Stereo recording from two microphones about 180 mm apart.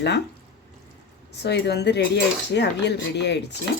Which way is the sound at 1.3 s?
70° left (ahead or behind).